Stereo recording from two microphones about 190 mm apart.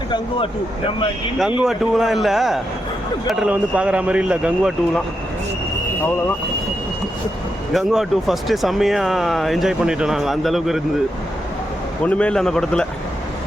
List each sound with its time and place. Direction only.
0.9 s speech: 25° left (ahead or behind)
1.6 s speech: centre (ahead or behind)
7.7 s speech: centre (ahead or behind)
12.0 s speech: 5° left (ahead or behind)